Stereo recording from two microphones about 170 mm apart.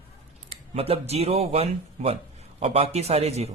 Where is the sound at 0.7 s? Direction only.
35° right (ahead or behind).